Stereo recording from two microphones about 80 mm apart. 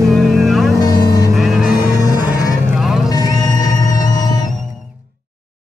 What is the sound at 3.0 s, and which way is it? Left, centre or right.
Music, left.